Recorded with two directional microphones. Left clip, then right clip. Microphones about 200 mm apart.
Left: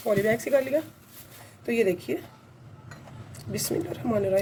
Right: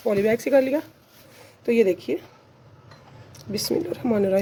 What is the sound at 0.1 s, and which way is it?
Speech, 40° right (ahead or behind).